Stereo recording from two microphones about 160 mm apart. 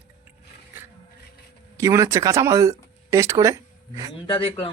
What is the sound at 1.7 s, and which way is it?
Speech, 20° right (ahead or behind).